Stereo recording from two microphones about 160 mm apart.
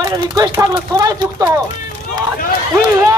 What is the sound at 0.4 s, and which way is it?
Speech, 20° right (ahead or behind).